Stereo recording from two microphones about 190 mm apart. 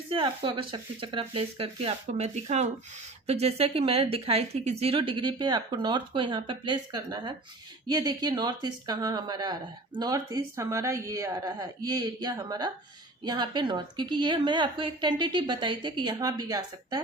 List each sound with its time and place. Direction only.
0.1 s speech: 25° right (ahead or behind)